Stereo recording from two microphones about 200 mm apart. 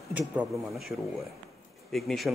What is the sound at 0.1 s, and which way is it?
Speech, 5° right (ahead or behind).